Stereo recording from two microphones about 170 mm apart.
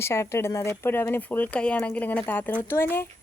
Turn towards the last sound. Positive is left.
turn(degrees=15)  # may be behind; listen again after turning